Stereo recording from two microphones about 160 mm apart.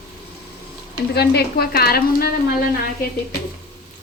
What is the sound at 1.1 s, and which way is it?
A woman's voice, 90° left.